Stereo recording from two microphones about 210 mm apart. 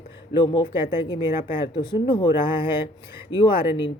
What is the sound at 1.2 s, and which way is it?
Speech, 10° right (ahead or behind).